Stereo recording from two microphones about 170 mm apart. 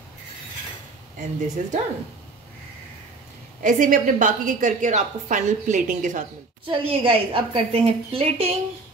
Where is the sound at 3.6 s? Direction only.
50° right (ahead or behind).